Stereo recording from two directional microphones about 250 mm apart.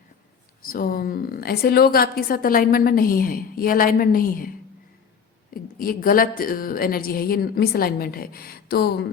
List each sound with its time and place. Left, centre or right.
0.6 s a woman's voice: left
5.8 s a woman's voice: left